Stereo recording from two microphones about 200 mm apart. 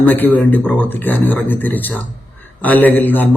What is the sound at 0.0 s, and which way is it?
A man's voice, 10° left (ahead or behind).